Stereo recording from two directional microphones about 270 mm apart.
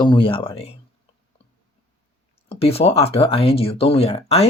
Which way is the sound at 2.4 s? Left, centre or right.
Left.